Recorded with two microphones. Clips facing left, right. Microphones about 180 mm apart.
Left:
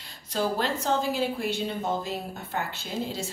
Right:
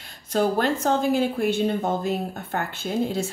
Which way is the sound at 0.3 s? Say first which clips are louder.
Right 6 dB; 50° right (ahead or behind).